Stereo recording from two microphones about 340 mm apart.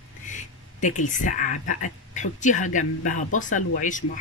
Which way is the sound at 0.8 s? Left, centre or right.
Left.